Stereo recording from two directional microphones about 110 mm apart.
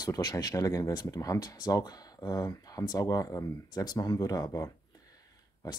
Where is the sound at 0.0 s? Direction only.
35° left (ahead or behind).